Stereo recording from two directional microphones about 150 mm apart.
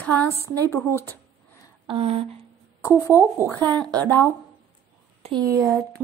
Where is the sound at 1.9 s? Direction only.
40° right (ahead or behind).